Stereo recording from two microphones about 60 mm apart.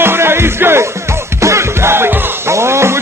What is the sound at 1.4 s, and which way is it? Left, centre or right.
Music, right.